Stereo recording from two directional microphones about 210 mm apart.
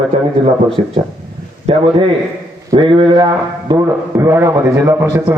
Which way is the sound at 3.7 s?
15° right (ahead or behind).